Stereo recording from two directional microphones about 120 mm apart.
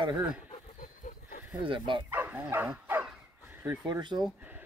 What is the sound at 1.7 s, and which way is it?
Speech, 45° right (ahead or behind).